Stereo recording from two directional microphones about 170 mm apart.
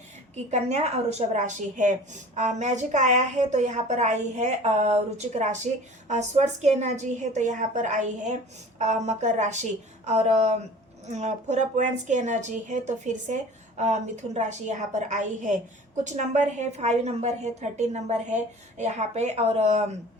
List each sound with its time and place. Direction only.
0.5 s a woman's voice: 40° right (ahead or behind)